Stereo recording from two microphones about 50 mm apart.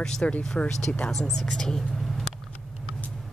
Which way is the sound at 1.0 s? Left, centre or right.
Centre.